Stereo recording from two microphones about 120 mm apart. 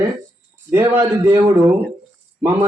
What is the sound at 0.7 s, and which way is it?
Speech, 25° right (ahead or behind).